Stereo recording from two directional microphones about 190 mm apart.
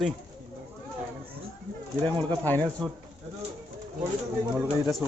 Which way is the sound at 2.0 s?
25° right (ahead or behind).